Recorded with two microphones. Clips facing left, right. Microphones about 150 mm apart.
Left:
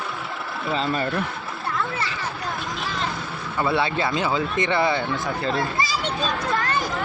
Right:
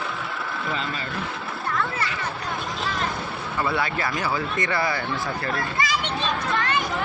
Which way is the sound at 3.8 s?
25° left (ahead or behind).